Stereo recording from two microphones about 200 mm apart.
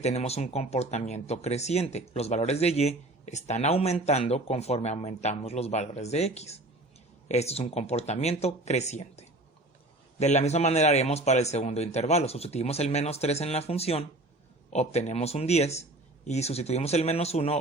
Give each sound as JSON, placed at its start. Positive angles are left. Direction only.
{"t": 0.0, "sound": "speech", "side_deg": 35}